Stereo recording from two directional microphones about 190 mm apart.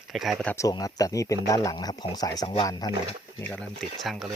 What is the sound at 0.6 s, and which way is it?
Speech, 20° left (ahead or behind).